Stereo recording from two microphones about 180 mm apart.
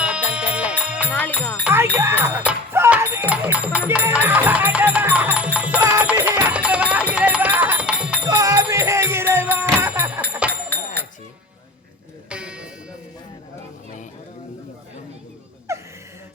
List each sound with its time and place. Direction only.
0.0 s music: 5° right (ahead or behind)
1.1 s music: 10° left (ahead or behind)
1.6 s a sound: 15° right (ahead or behind)
5.5 s music: 10° right (ahead or behind)
8.3 s music: 20° right (ahead or behind)
10.2 s jingle bell: 5° right (ahead or behind)
12.3 s music: 5° right (ahead or behind)
15.7 s gasp: 15° right (ahead or behind)